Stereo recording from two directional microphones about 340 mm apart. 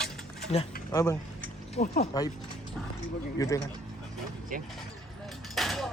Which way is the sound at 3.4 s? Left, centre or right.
Centre.